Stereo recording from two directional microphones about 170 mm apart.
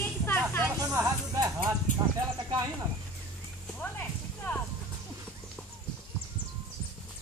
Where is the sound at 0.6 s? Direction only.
20° right (ahead or behind).